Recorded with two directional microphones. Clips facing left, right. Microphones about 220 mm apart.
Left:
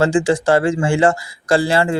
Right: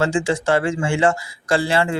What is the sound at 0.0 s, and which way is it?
Speech, 35° left (ahead or behind).